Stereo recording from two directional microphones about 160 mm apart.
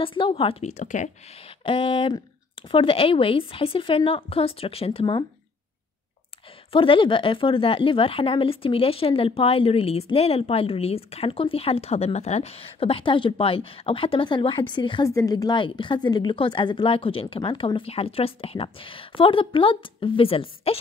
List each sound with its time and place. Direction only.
0.0 s a woman's voice: 35° left (ahead or behind); by 1.1 s 50° left (ahead or behind)
1.6 s a woman's voice: 35° left (ahead or behind)
6.7 s a woman's voice: 35° left (ahead or behind)